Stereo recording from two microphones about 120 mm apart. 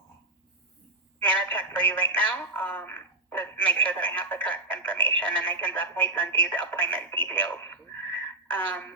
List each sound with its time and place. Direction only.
1.2 s a woman's voice: 10° left (ahead or behind)